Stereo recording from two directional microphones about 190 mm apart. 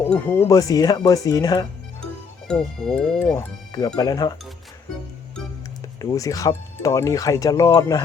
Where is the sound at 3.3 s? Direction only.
20° left (ahead or behind).